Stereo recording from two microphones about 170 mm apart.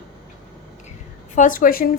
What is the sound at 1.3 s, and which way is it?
Speech, 50° left (ahead or behind).